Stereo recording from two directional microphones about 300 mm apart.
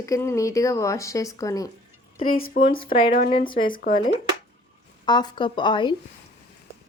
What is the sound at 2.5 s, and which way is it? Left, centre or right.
Speech, left.